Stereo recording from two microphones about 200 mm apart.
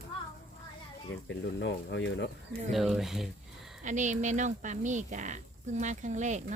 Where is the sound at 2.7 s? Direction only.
Centre (ahead or behind).